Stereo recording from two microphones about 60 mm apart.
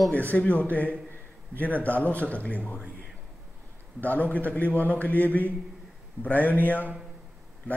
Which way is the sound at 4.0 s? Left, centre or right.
Left.